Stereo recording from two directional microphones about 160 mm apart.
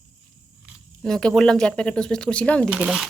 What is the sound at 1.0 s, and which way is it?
Speech, 5° left (ahead or behind).